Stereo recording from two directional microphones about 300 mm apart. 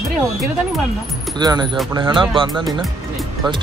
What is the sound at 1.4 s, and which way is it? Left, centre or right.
Speech, centre.